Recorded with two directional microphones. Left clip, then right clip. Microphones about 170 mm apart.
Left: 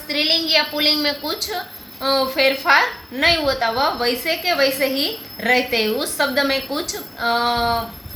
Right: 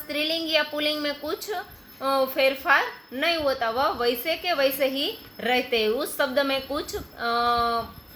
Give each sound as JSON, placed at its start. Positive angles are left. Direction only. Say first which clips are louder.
{"t": 0.1, "sound": "a woman's voice", "louder": "left 7 dB", "side_deg": -75}